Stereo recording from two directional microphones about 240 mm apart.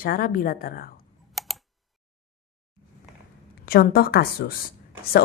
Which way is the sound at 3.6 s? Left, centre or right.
Left.